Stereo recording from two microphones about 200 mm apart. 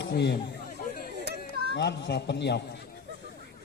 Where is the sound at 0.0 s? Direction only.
60° left (ahead or behind).